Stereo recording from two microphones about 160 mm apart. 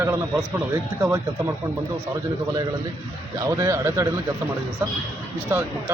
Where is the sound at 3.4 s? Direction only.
20° right (ahead or behind).